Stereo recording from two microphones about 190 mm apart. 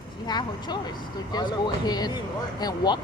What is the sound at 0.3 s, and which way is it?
Speech, 20° left (ahead or behind).